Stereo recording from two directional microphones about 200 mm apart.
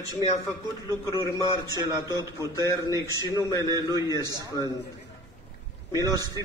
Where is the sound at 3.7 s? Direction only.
20° right (ahead or behind).